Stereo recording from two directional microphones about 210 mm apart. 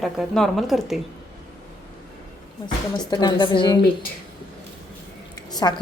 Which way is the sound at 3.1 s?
20° left (ahead or behind).